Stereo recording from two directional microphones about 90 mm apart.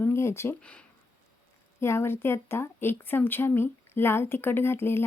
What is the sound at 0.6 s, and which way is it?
Speech, 10° left (ahead or behind).